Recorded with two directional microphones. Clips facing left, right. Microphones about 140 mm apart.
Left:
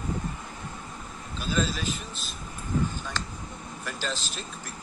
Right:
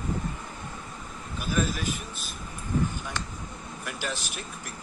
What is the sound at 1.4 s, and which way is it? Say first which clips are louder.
Speech: even; 10° right (ahead or behind).